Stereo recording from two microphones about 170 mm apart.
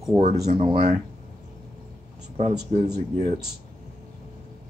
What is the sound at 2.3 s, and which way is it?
Speech, 40° right (ahead or behind).